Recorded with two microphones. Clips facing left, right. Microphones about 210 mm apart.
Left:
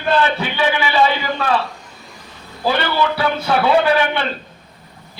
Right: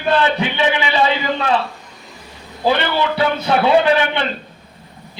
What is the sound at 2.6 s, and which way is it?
A man's voice, 20° right (ahead or behind).